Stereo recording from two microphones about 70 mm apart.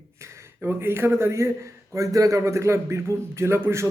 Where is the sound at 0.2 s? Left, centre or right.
Right.